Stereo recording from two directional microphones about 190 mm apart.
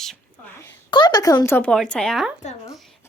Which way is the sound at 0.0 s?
5° left (ahead or behind).